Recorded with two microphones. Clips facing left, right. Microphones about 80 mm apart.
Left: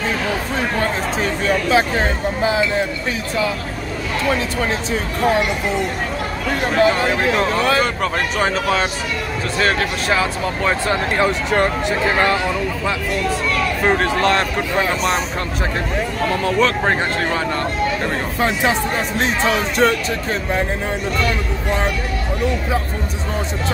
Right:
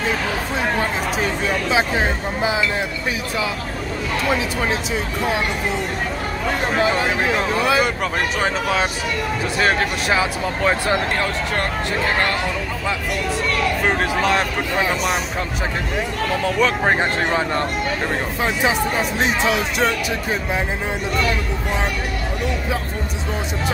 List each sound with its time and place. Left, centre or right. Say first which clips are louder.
0.7 s speech: left 1 dB; centre
4.3 s speech: left 1 dB; centre
6.8 s speech: left 5 dB; centre
9.6 s speech: left 1 dB; centre
11.1 s speech: left 5 dB; centre
14.0 s speech: left 2 dB; centre
16.5 s speech: even; centre
18.4 s speech: left 2 dB; centre
21.2 s speech: left 1 dB; centre